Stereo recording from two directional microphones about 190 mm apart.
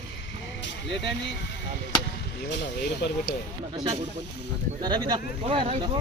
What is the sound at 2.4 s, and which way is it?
Speech, 65° left (ahead or behind).